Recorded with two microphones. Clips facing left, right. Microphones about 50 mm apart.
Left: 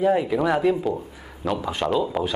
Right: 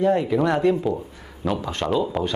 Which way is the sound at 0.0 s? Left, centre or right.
Centre.